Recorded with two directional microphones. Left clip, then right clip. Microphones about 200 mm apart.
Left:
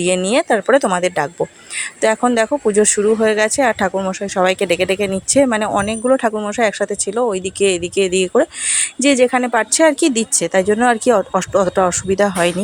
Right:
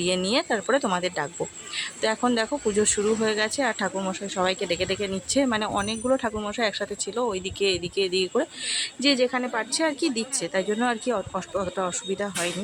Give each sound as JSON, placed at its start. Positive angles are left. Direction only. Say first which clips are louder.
{"t": 0.0, "sound": "speech", "louder": "left 9 dB", "side_deg": 30}